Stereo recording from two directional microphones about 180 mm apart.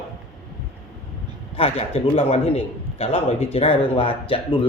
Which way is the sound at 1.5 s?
35° left (ahead or behind).